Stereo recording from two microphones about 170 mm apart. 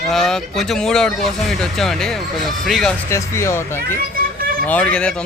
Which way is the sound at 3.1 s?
15° left (ahead or behind).